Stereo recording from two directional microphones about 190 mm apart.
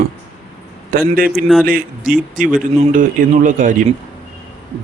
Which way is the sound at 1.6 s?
50° right (ahead or behind).